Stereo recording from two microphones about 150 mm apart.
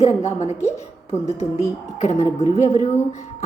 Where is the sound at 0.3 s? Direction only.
50° left (ahead or behind).